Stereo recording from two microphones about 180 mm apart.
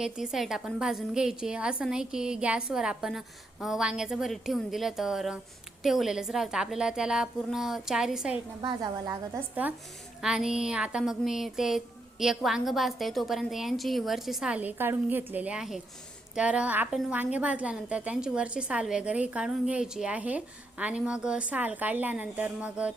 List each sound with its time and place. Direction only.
0.0 s a woman's voice: centre (ahead or behind)
8.6 s a woman's voice: 25° right (ahead or behind)
9.6 s a woman's voice: 10° right (ahead or behind)